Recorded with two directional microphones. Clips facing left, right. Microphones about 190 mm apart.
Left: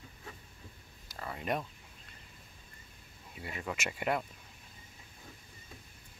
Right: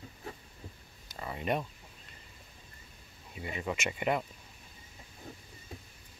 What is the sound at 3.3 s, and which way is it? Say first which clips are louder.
Speech: right 4 dB; centre (ahead or behind).